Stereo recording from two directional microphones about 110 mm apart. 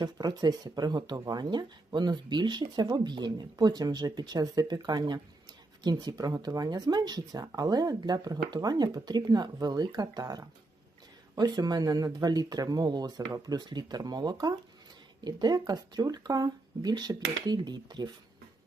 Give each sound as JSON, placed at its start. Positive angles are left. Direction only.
{"t": 0.0, "sound": "speech", "side_deg": -40}